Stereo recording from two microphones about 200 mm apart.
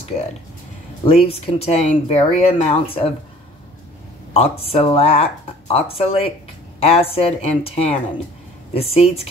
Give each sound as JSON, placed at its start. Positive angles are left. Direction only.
{"t": 1.0, "sound": "speech", "side_deg": 30}
{"t": 4.3, "sound": "speech", "side_deg": 30}